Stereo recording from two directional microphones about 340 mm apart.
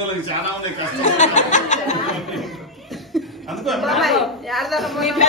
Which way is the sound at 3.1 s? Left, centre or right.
Centre.